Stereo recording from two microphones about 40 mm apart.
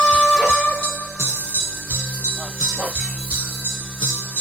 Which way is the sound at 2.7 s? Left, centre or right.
Right.